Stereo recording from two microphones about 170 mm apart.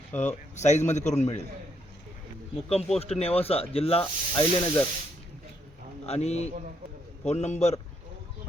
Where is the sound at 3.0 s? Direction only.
35° left (ahead or behind).